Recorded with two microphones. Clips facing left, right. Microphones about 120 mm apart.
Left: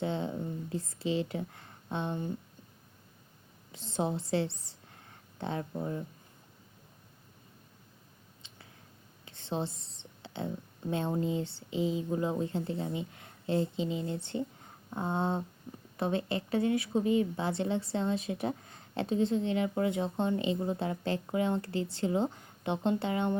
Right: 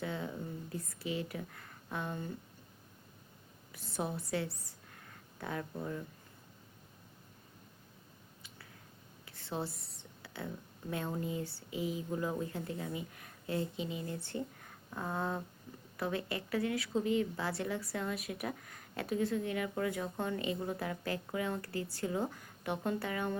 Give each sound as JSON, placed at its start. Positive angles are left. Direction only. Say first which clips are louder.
{"t": 0.0, "sound": "a woman's voice", "louder": "left 6 dB", "side_deg": 25}
{"t": 3.7, "sound": "a woman's voice", "louder": "left 6 dB", "side_deg": 25}
{"t": 8.4, "sound": "a sound", "louder": "left 1 dB", "side_deg": 25}
{"t": 9.2, "sound": "a woman's voice", "louder": "left 4 dB", "side_deg": 25}